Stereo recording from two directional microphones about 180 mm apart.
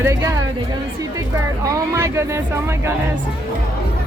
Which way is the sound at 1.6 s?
20° right (ahead or behind).